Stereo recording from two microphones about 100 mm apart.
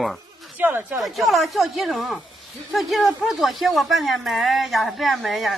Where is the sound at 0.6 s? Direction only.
20° right (ahead or behind).